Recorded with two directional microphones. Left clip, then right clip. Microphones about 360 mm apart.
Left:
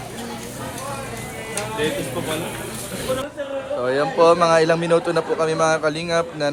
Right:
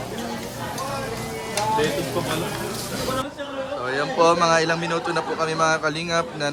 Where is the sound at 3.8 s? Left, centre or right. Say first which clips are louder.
Left 3 dB; centre.